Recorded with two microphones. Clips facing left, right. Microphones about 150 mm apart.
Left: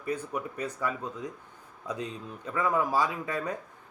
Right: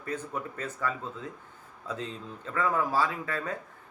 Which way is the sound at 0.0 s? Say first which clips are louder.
Left 2 dB; 10° left (ahead or behind).